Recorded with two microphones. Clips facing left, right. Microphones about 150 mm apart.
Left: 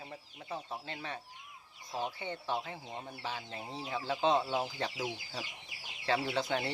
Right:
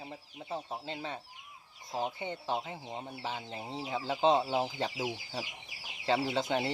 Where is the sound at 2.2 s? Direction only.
15° right (ahead or behind).